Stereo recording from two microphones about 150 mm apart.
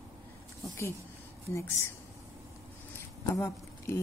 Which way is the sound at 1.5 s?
20° left (ahead or behind).